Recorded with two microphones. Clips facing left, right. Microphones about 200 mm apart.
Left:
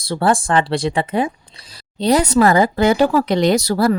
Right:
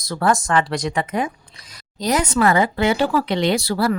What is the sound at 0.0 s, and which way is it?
Speech, 30° left (ahead or behind).